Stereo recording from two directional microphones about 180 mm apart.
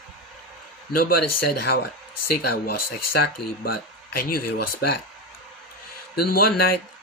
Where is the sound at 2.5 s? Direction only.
60° left (ahead or behind).